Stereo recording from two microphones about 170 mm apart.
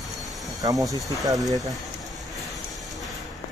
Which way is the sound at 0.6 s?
20° right (ahead or behind).